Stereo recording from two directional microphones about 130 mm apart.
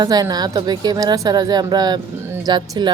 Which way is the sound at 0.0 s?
30° right (ahead or behind).